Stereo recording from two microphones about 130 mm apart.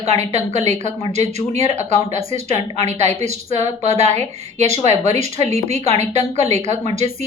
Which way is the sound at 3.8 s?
60° right (ahead or behind).